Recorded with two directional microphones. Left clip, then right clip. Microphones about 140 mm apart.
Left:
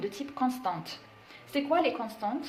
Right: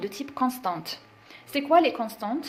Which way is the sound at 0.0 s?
50° right (ahead or behind).